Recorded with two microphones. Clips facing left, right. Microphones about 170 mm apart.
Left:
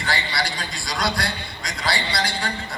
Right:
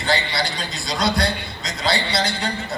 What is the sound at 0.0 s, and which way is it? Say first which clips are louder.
A man's voice: right 4 dB; 20° right (ahead or behind).